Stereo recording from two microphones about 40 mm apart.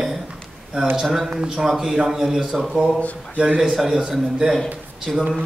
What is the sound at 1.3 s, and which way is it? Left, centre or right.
Speech, right.